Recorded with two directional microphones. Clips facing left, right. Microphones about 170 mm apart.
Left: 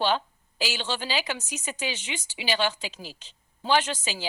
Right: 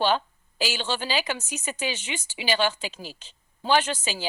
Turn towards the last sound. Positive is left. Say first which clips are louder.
# right 2 dB
turn(degrees=-50)  # may be behind; listen again after turning